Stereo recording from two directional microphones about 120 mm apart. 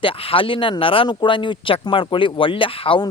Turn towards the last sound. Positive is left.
turn(degrees=50)  # may be behind; listen again after turning